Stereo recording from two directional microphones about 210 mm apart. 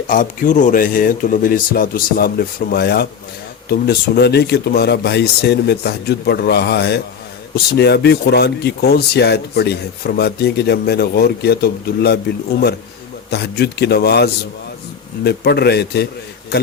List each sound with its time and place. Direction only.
0.1 s speech: 40° left (ahead or behind)